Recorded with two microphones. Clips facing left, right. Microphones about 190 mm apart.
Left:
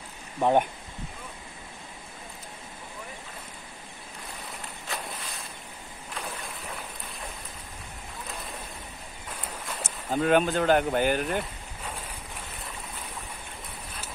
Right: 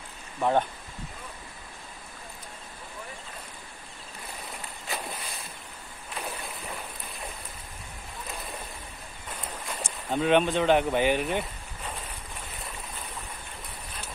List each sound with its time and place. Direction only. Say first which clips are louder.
0.4 s speech: left 2 dB; 15° left (ahead or behind)
9.7 s speech: even; 5° left (ahead or behind)